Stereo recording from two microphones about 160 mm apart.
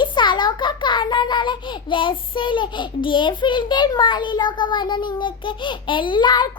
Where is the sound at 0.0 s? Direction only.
30° left (ahead or behind).